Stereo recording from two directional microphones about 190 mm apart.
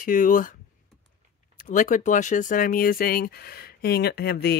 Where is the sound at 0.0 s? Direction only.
45° left (ahead or behind).